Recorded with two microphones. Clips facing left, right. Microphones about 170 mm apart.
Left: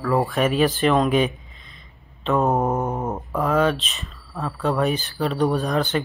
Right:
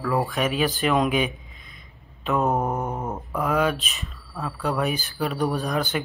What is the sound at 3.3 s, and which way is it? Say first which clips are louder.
Speech: left 3 dB; centre (ahead or behind).